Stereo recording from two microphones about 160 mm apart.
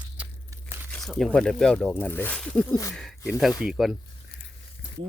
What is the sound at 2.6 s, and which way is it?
Speech, 20° left (ahead or behind).